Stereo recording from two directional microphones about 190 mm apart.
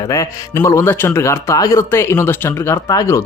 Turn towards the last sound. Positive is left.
turn(degrees=15)  # may be behind; listen again after turning